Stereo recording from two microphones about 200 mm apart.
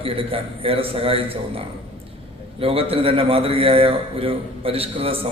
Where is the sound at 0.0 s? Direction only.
30° right (ahead or behind).